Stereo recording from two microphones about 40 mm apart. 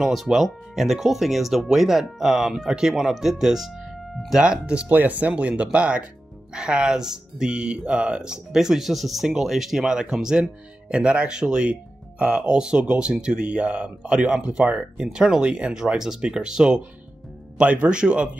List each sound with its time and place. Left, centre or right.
0.0 s speech: centre
3.8 s music: centre
4.4 s speech: right
4.8 s speech: right
5.3 s speech: right
8.5 s speech: centre
10.9 s speech: right
17.6 s speech: right